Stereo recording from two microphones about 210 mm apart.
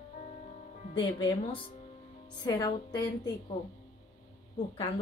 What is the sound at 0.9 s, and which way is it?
A woman's voice, 25° left (ahead or behind).